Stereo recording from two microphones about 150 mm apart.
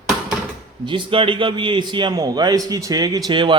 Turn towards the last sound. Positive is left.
turn(degrees=-35)  # may be behind; listen again after turning